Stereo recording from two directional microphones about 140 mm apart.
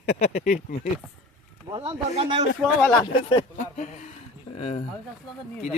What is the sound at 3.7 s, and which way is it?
Speech, 60° left (ahead or behind).